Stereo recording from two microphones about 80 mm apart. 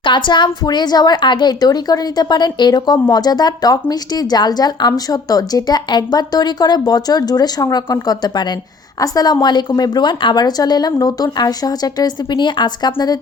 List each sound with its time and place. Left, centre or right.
0.0 s a woman's voice: left